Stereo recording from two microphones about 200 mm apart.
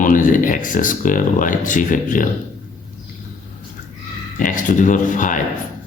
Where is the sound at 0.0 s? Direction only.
40° left (ahead or behind).